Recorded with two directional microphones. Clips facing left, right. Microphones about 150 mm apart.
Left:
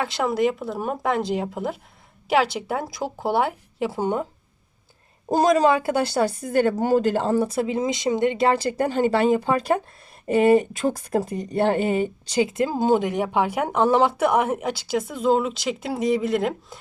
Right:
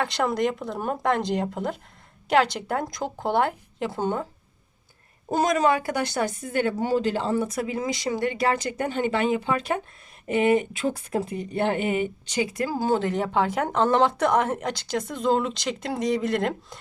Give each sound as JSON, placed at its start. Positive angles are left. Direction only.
{"t": 0.0, "sound": "speech", "side_deg": 5}
{"t": 5.3, "sound": "speech", "side_deg": 35}